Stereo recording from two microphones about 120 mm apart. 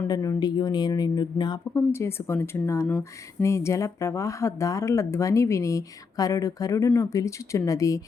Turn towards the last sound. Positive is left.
turn(degrees=30)  # may be behind; listen again after turning